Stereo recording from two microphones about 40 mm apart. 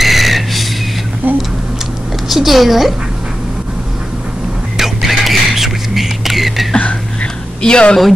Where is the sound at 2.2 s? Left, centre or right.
Centre.